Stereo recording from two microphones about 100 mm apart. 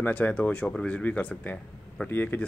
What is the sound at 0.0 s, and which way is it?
Speech, 15° left (ahead or behind).